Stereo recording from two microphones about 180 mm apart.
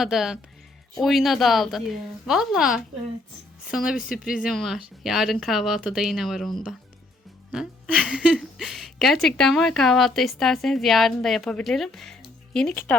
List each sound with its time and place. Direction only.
0.0 s a woman's voice: centre (ahead or behind)